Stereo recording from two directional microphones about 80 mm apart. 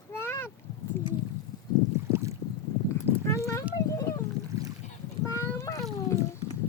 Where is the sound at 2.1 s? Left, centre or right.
Right.